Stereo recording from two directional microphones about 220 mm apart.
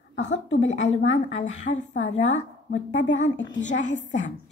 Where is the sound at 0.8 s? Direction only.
30° left (ahead or behind).